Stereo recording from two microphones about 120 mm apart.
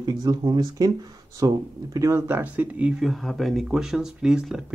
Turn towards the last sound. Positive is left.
turn(degrees=-5)  # may be behind; listen again after turning